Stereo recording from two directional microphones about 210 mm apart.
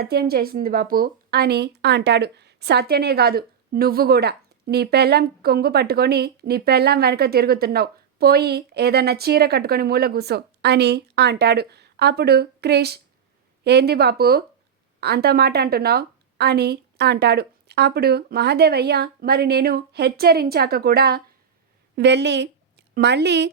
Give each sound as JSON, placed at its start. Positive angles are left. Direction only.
{"t": 0.0, "sound": "a woman's voice", "side_deg": -50}